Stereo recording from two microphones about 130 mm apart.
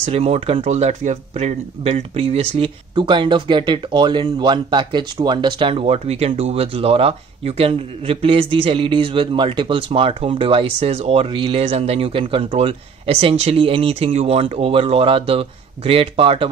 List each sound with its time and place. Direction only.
0.0 s speech: 50° right (ahead or behind)
2.9 s speech: 40° right (ahead or behind)